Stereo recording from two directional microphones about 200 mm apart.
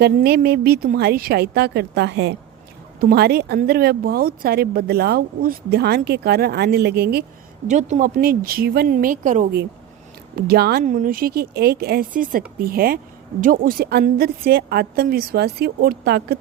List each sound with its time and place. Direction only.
0.0 s speech: 50° right (ahead or behind)
7.7 s speech: 35° right (ahead or behind)
10.4 s speech: 50° right (ahead or behind)